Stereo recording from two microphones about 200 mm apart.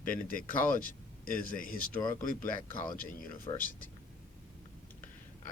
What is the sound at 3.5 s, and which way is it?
Speech, 25° left (ahead or behind).